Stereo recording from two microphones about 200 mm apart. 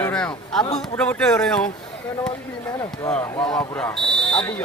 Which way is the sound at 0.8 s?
5° left (ahead or behind).